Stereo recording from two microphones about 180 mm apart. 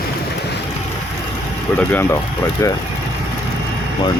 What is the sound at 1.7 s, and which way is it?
Speech, 10° left (ahead or behind).